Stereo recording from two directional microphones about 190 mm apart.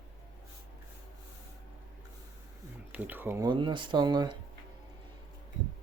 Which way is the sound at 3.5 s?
25° right (ahead or behind).